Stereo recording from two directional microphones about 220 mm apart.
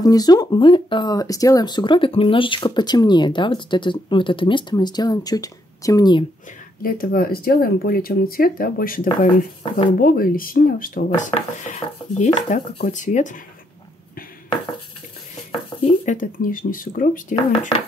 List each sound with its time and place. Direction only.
0.0 s speech: 15° left (ahead or behind)
6.8 s speech: 40° left (ahead or behind)
15.8 s speech: 35° left (ahead or behind)